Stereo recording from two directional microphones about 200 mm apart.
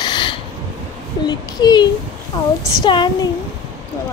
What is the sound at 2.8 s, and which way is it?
Speech, 20° left (ahead or behind).